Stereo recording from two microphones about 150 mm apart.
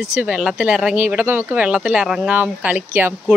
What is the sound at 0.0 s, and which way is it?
Speech, 5° right (ahead or behind).